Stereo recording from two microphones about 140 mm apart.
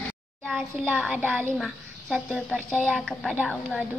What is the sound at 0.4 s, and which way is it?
A child's voice, 5° left (ahead or behind).